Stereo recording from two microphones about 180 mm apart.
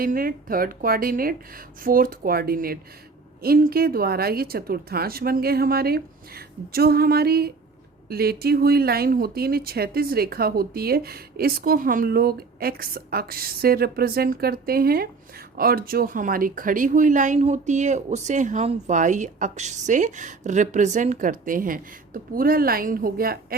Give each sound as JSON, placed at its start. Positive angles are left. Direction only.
{"t": 0.0, "sound": "speech", "side_deg": -50}